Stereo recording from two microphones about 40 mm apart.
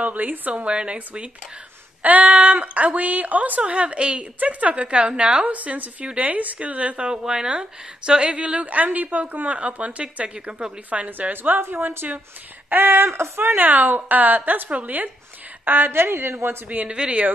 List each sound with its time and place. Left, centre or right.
0.0 s speech: right
0.5 s a woman's voice: right
5.5 s a woman's voice: right
7.1 s a woman's voice: centre
11.1 s speech: right
11.6 s speech: right
12.6 s a sound: right
13.6 s a woman's voice: right
15.9 s speech: right
16.6 s a woman's voice: right
16.9 s a woman's voice: right